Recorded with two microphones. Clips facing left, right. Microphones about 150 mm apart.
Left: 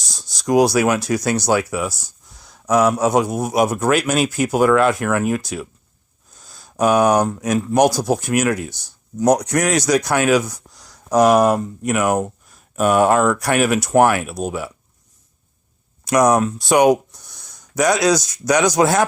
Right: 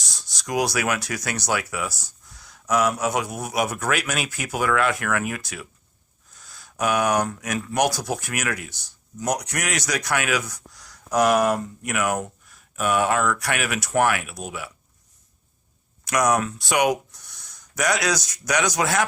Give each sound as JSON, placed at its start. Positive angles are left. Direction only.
{"t": 0.2, "sound": "speech", "side_deg": 35}
{"t": 16.0, "sound": "speech", "side_deg": 35}